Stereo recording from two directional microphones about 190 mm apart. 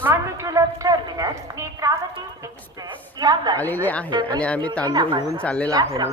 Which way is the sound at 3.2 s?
20° right (ahead or behind).